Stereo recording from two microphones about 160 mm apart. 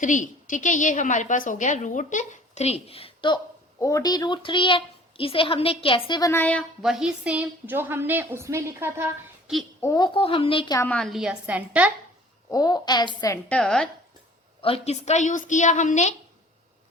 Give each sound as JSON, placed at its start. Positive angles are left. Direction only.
{"t": 0.0, "sound": "a woman's voice", "side_deg": 50}
{"t": 6.8, "sound": "a woman's voice", "side_deg": -5}
{"t": 9.5, "sound": "a woman's voice", "side_deg": -5}
{"t": 9.8, "sound": "a woman's voice", "side_deg": 20}
{"t": 10.2, "sound": "a woman's voice", "side_deg": 35}
{"t": 10.8, "sound": "a woman's voice", "side_deg": 5}
{"t": 12.5, "sound": "a woman's voice", "side_deg": 25}
{"t": 13.5, "sound": "a woman's voice", "side_deg": 5}
{"t": 14.6, "sound": "a woman's voice", "side_deg": 40}